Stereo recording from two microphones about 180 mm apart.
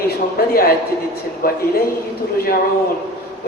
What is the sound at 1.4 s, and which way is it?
Speech, 55° left (ahead or behind).